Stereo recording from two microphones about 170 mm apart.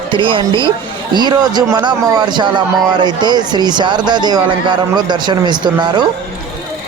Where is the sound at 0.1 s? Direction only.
30° right (ahead or behind).